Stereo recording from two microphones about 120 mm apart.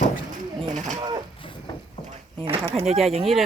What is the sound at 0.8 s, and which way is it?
Pigeon, 90° right.